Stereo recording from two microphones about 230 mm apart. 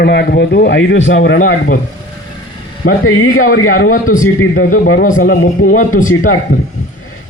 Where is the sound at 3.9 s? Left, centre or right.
Left.